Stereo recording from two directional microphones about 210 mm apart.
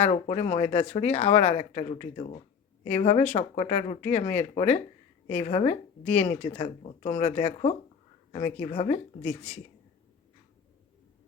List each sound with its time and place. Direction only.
0.0 s speech: 30° left (ahead or behind)
9.2 s speech: 10° left (ahead or behind)